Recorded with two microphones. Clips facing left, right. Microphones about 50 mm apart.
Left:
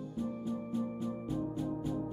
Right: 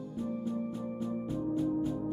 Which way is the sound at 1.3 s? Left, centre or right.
Right.